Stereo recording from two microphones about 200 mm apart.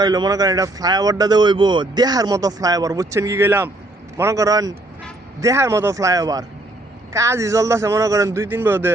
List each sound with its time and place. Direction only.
0.0 s a man's voice: 20° right (ahead or behind)